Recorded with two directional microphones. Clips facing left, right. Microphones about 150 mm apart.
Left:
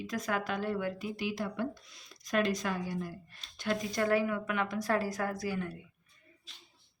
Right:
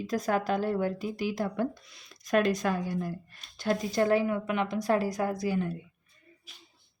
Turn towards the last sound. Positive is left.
turn(degrees=-20)  # may be behind; listen again after turning